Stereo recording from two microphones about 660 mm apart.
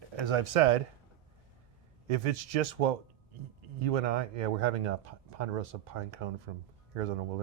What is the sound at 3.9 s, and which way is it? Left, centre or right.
Speech, right.